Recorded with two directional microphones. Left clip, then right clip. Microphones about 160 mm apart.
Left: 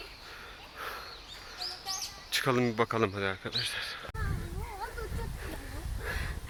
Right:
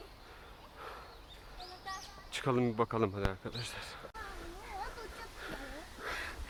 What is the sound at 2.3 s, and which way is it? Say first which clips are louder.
Speech: left 5 dB; centre (ahead or behind).